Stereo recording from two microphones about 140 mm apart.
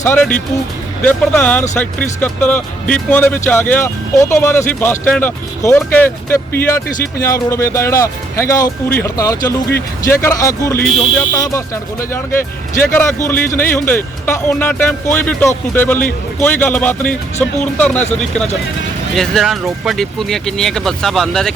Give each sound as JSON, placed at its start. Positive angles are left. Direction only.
{"t": 0.0, "sound": "speech", "side_deg": 10}